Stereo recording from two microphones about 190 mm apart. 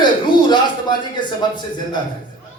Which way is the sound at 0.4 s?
25° left (ahead or behind).